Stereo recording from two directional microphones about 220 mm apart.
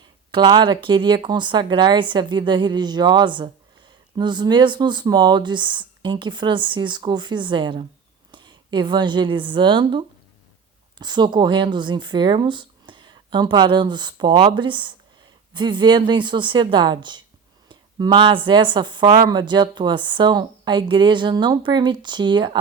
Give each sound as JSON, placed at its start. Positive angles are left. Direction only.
{"t": 0.3, "sound": "a woman's voice", "side_deg": -20}